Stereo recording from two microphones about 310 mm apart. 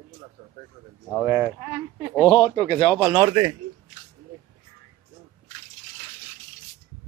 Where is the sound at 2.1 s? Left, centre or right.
Centre.